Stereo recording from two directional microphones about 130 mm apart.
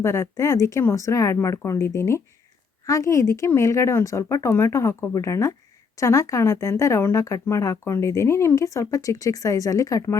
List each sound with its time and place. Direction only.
0.0 s speech: 20° left (ahead or behind)